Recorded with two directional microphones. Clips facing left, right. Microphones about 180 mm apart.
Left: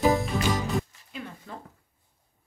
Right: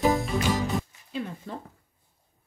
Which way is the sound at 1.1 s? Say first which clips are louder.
Right 6 dB; 30° right (ahead or behind).